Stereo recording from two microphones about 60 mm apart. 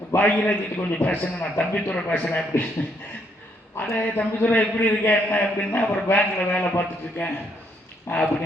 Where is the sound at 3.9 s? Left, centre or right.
Left.